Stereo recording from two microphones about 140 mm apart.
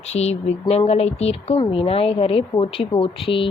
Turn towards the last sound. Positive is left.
turn(degrees=40)  # may be behind; listen again after turning